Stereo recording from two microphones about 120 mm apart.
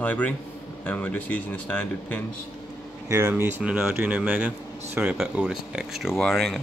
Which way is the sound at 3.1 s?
20° right (ahead or behind).